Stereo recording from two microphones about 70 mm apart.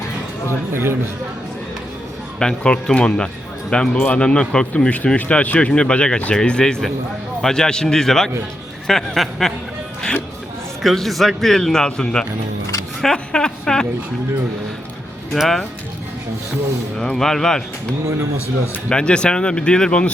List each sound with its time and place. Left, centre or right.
0.7 s a man's voice: right
2.4 s a man's voice: centre
10.8 s a man's voice: centre
15.3 s a man's voice: centre
17.0 s speech: centre